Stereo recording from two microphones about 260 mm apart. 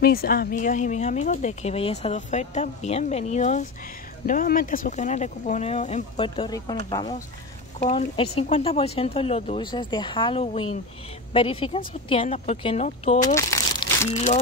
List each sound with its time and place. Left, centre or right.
0.0 s a woman's voice: left
13.2 s crumpling: centre